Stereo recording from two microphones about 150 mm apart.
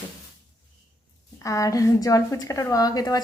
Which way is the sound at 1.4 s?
20° left (ahead or behind).